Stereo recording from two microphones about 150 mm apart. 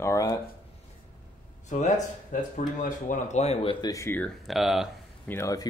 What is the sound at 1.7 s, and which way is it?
Speech, 60° left (ahead or behind).